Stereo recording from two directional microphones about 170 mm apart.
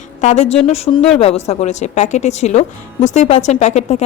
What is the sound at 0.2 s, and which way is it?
A woman's voice, 40° left (ahead or behind).